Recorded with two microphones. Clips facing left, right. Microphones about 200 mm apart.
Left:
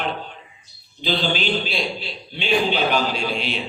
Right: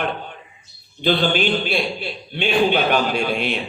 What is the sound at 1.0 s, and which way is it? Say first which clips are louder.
A man's voice: right 4 dB; 55° right (ahead or behind).